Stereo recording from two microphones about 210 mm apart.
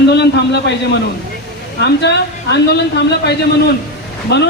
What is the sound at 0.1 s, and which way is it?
A man's voice, 50° left (ahead or behind).